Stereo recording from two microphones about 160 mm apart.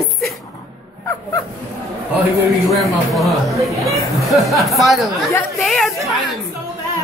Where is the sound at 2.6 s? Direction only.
Centre (ahead or behind).